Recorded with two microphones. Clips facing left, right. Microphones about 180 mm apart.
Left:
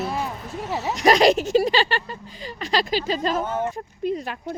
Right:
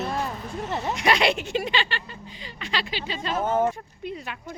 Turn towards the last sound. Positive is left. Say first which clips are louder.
# left 8 dB
turn(degrees=40)  # may be behind; listen again after turning